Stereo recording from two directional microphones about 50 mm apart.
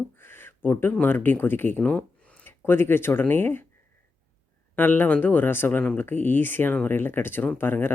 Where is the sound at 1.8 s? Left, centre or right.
Left.